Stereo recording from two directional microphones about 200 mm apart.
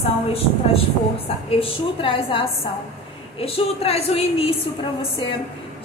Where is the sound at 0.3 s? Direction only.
30° left (ahead or behind).